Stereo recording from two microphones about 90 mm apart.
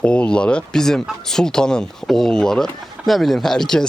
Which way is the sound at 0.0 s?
15° left (ahead or behind).